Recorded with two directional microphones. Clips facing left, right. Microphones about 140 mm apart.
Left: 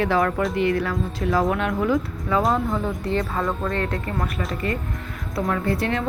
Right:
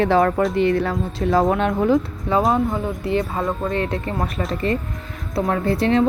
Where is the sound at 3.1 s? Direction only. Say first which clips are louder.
Right 3 dB; 20° right (ahead or behind).